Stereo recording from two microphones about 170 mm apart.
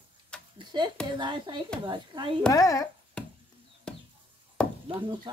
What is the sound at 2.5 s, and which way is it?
Speech, 20° left (ahead or behind).